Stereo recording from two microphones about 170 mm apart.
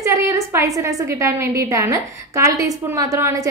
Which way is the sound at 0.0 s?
20° right (ahead or behind).